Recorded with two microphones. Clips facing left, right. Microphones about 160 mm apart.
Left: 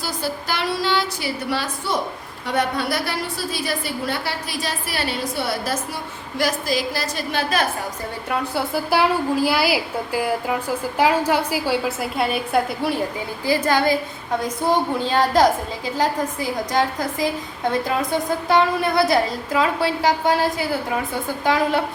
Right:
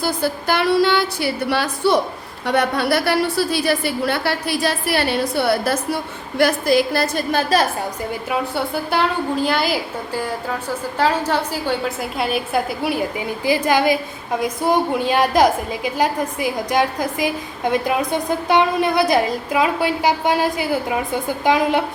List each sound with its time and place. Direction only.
0.0 s a woman's voice: 55° right (ahead or behind)
8.3 s a woman's voice: centre (ahead or behind); by 21.8 s 15° right (ahead or behind)